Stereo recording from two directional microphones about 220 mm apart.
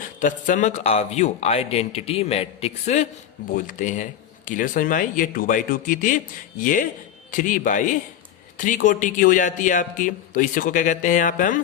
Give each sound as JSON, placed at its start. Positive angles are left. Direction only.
{"t": 0.2, "sound": "a man's voice", "side_deg": 35}